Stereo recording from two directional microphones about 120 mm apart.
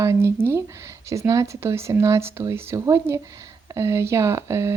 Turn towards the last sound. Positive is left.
turn(degrees=-25)  # may be behind; listen again after turning